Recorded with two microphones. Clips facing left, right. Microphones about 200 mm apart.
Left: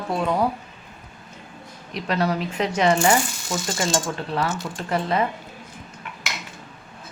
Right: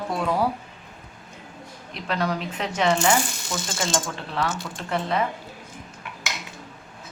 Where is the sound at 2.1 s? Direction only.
5° left (ahead or behind).